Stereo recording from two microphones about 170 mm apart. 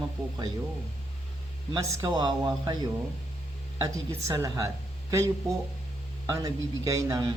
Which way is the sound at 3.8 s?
20° right (ahead or behind).